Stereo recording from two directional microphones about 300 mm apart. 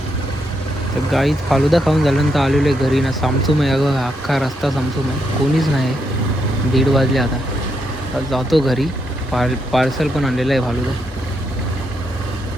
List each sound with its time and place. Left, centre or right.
1.1 s speech: centre
6.7 s speech: centre
8.3 s speech: centre